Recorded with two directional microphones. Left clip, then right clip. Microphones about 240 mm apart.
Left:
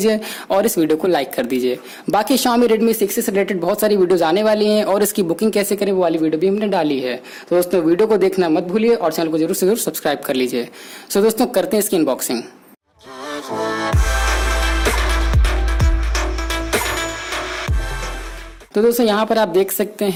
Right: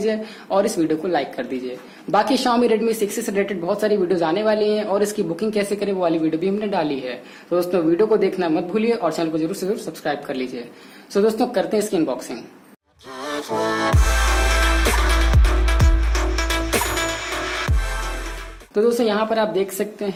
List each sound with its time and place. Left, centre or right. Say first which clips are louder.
0.0 s speech: left 5 dB; left
13.2 s music: even; centre
18.7 s speech: left 3 dB; left